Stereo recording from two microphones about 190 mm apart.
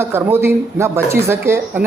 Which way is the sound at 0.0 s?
10° right (ahead or behind).